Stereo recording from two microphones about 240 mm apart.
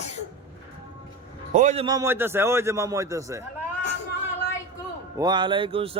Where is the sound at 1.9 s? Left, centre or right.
Centre.